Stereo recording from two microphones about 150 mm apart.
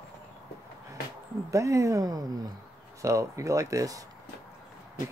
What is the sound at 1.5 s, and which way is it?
Speech, 20° right (ahead or behind).